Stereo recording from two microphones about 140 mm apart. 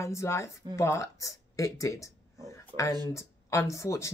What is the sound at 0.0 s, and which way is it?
Speech, 20° left (ahead or behind).